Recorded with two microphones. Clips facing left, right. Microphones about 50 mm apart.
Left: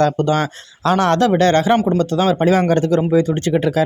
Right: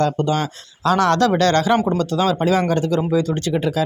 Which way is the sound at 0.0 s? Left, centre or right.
Left.